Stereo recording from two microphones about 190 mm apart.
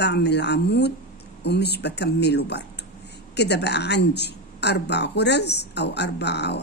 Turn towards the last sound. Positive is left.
turn(degrees=65)  # may be behind; listen again after turning